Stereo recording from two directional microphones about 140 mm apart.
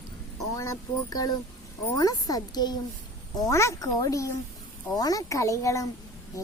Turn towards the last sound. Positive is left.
turn(degrees=20)  # may be behind; listen again after turning